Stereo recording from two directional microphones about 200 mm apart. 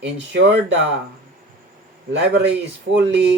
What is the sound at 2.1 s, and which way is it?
Speech, 60° right (ahead or behind).